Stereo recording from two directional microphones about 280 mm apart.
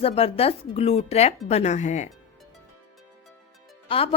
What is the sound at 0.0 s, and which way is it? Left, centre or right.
A woman's voice, left.